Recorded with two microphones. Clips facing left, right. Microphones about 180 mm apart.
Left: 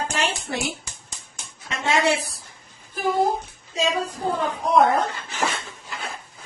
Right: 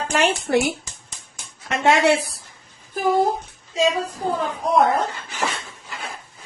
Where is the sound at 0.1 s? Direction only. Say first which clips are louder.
Right 8 dB; 60° right (ahead or behind).